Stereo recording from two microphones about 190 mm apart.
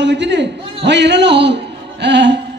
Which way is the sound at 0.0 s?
65° right (ahead or behind).